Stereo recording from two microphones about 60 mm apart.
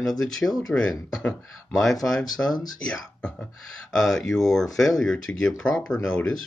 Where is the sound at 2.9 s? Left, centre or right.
Centre.